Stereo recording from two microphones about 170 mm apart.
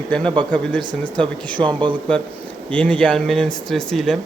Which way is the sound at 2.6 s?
5° left (ahead or behind).